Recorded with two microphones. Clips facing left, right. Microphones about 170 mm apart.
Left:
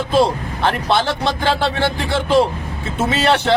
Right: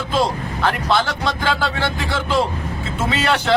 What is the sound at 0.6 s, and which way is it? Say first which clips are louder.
Speech: left 2 dB; 25° left (ahead or behind).